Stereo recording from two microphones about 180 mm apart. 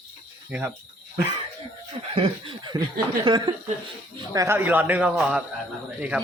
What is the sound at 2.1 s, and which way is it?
Speech, 30° right (ahead or behind).